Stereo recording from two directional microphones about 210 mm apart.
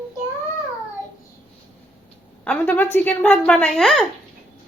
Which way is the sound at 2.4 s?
10° left (ahead or behind).